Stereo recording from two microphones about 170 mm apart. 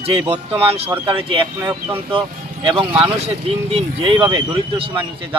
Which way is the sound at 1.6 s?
15° right (ahead or behind).